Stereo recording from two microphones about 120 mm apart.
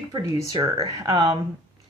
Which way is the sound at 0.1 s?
30° right (ahead or behind).